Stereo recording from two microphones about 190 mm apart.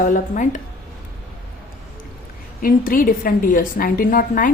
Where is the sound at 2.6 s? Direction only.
50° left (ahead or behind).